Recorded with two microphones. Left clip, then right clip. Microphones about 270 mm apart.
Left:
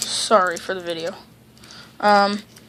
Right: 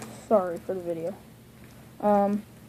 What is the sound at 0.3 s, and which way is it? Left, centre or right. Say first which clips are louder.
Speech: left 6 dB; left.